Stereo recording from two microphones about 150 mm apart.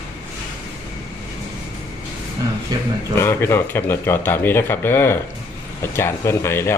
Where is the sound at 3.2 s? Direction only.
15° left (ahead or behind).